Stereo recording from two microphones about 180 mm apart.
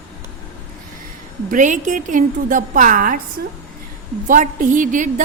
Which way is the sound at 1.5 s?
45° right (ahead or behind).